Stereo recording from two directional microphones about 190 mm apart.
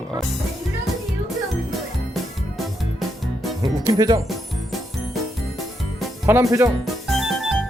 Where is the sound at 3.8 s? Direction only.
20° right (ahead or behind).